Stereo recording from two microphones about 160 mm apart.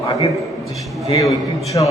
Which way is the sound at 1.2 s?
20° left (ahead or behind).